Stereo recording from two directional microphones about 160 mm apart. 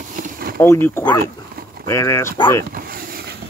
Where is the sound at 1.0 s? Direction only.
25° left (ahead or behind).